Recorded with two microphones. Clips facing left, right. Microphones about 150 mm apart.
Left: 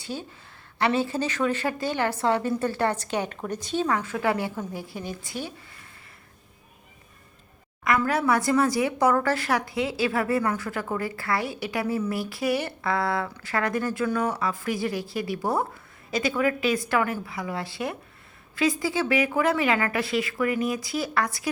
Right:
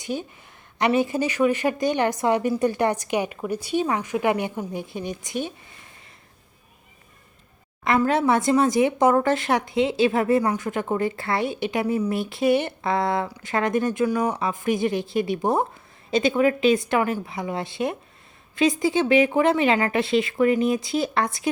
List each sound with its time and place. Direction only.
0.0 s a woman's voice: 15° right (ahead or behind)
7.9 s speech: 25° right (ahead or behind)